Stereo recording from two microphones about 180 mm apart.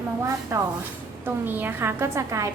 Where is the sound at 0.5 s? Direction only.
15° right (ahead or behind).